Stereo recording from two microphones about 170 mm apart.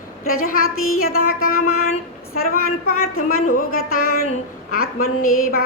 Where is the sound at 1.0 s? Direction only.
60° left (ahead or behind).